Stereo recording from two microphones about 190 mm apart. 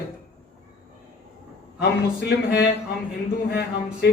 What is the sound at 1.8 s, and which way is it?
A man's voice, 60° left (ahead or behind).